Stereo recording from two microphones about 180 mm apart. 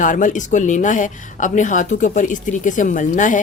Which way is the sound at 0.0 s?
45° left (ahead or behind).